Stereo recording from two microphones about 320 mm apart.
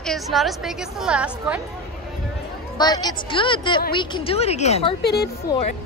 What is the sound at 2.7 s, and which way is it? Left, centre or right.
A woman's voice, centre.